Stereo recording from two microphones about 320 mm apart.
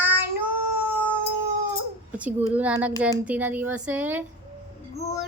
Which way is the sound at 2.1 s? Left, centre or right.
Centre.